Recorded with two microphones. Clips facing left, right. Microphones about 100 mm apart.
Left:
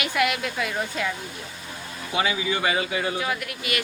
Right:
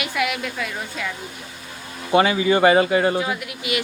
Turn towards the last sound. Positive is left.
turn(degrees=-20)  # may be behind; listen again after turning